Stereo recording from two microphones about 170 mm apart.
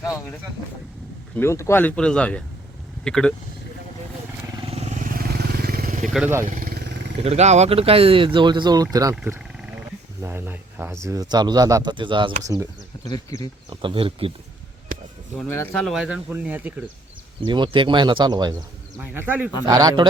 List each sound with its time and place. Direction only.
0.0 s vehicle: 20° left (ahead or behind)
1.4 s speech: 15° left (ahead or behind)
4.5 s vehicle: 35° right (ahead or behind); by 6.1 s 50° right (ahead or behind)
6.1 s speech: 10° right (ahead or behind)
6.5 s vehicle: 60° right (ahead or behind)
7.3 s speech: 40° right (ahead or behind)
12.5 s speech: 20° right (ahead or behind)
13.1 s speech: 25° left (ahead or behind)
13.7 s speech: 30° right (ahead or behind)
15.4 s speech: 10° left (ahead or behind); by 16.8 s 10° right (ahead or behind)
17.4 s speech: 30° right (ahead or behind)
18.9 s speech: 10° right (ahead or behind)
19.6 s speech: 20° right (ahead or behind)